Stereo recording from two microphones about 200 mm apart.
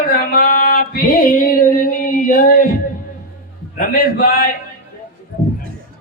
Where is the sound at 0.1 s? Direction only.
45° left (ahead or behind).